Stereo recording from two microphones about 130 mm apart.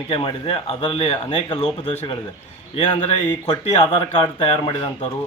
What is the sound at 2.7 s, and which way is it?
Speech, 35° left (ahead or behind).